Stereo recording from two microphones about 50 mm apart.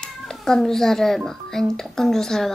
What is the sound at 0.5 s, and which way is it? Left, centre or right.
A child's voice, centre.